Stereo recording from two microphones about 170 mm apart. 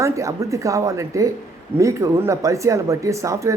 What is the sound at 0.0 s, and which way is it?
A man's voice, 20° right (ahead or behind).